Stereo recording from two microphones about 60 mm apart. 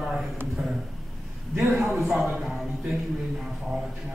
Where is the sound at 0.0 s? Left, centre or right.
Centre.